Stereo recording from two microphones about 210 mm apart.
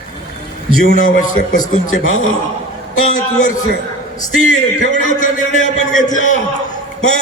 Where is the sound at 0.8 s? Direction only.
40° left (ahead or behind).